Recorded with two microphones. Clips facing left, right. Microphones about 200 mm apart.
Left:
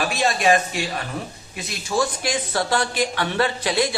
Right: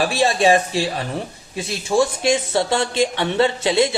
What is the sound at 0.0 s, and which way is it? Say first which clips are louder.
Speech: right 4 dB; 30° right (ahead or behind).